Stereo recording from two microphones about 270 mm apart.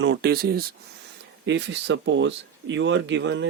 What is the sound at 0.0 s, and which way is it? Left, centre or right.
Speech, right.